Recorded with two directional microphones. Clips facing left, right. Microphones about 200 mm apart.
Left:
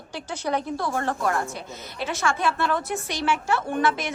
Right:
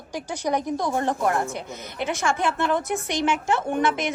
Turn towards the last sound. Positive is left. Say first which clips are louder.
# right 1 dB
turn(degrees=-20)  # may be behind; listen again after turning